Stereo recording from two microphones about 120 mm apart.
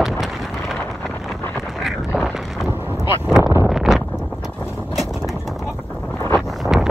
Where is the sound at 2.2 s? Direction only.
5° right (ahead or behind).